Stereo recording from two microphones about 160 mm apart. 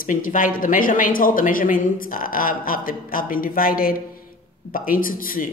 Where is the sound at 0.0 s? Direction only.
55° left (ahead or behind).